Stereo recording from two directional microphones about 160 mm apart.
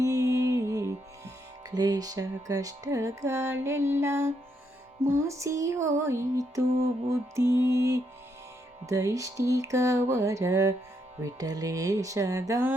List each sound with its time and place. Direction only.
0.0 s music: 20° right (ahead or behind)
5.0 s mantra: 15° right (ahead or behind)